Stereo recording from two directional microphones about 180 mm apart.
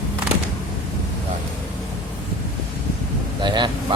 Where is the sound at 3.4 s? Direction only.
25° right (ahead or behind).